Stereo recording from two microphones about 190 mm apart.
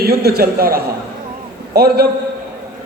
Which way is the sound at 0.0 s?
55° right (ahead or behind).